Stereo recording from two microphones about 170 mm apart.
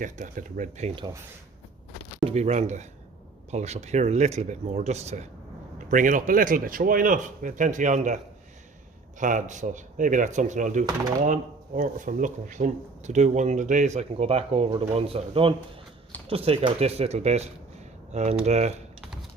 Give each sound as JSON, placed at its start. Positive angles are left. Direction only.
{"t": 0.0, "sound": "speech", "side_deg": -50}
{"t": 2.2, "sound": "speech", "side_deg": -40}
{"t": 5.9, "sound": "speech", "side_deg": -50}